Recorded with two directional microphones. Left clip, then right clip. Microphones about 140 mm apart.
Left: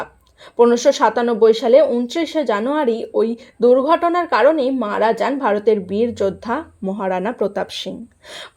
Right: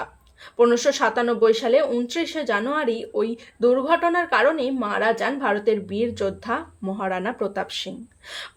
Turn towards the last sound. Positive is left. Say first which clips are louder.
# left 5 dB
turn(degrees=35)  # may be behind; listen again after turning